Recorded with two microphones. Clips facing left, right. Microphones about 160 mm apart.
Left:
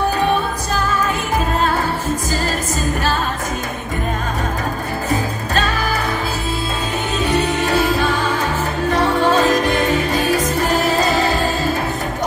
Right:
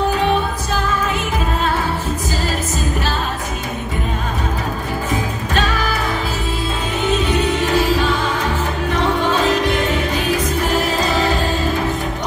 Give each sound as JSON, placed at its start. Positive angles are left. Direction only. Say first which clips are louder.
{"t": 7.3, "sound": "music", "louder": "even", "side_deg": 35}
{"t": 8.9, "sound": "music", "louder": "left 3 dB", "side_deg": 40}